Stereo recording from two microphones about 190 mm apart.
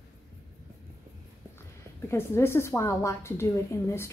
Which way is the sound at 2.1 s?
15° left (ahead or behind).